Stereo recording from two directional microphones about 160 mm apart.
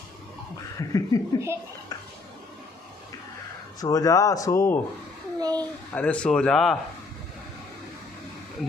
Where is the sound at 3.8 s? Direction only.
20° left (ahead or behind).